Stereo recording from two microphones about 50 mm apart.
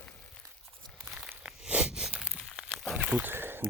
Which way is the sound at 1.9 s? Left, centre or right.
Centre.